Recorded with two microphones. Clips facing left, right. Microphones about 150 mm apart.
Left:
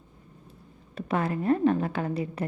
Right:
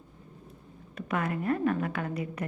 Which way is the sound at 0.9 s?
30° left (ahead or behind).